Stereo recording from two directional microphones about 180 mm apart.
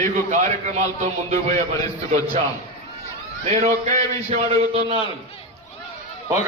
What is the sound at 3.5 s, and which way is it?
A man's voice, 35° right (ahead or behind).